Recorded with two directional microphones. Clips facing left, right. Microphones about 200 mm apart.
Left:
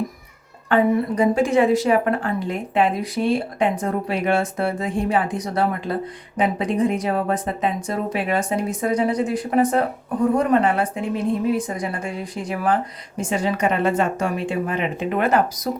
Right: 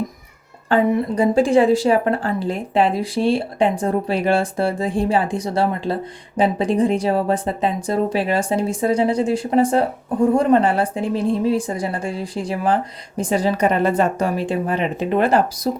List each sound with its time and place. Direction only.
0.7 s a woman's voice: 30° right (ahead or behind)